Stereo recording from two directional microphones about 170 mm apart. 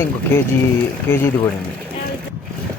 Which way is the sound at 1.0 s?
15° left (ahead or behind).